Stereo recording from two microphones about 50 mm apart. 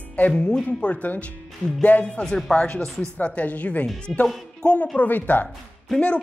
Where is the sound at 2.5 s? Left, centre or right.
Left.